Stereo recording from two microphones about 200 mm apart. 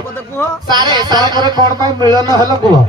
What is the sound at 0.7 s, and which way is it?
A man's voice, 20° right (ahead or behind).